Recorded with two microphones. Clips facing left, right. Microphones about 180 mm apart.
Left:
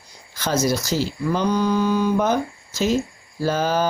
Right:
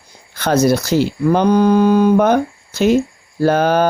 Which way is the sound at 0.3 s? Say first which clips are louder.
Right 7 dB; 60° right (ahead or behind).